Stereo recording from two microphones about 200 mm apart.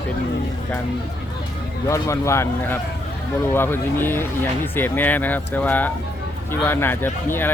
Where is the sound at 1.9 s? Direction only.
15° left (ahead or behind).